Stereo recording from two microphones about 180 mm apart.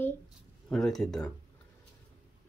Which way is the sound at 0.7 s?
Centre (ahead or behind).